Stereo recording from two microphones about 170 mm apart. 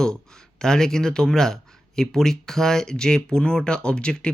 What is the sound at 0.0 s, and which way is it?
Speech, 5° left (ahead or behind).